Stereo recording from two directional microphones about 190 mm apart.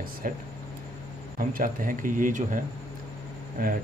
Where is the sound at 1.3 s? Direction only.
45° right (ahead or behind).